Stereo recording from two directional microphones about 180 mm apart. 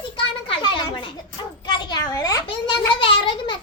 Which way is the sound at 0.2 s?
25° left (ahead or behind).